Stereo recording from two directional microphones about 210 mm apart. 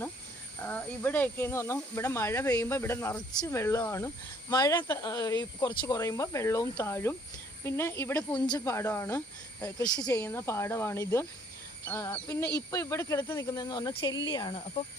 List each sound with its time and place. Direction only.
0.6 s speech: 10° left (ahead or behind)